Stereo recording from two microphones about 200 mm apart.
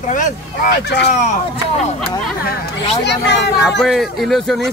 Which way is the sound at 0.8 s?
60° left (ahead or behind).